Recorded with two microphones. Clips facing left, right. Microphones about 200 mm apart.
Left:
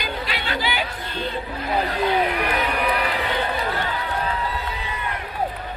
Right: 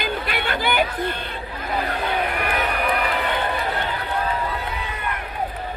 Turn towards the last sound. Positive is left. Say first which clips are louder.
# right 1 dB
turn(degrees=-60)  # may be behind; listen again after turning